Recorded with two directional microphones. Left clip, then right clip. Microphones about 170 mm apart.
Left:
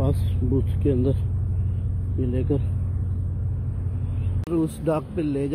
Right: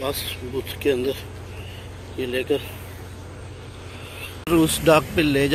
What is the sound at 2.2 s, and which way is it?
Speech, 5° right (ahead or behind).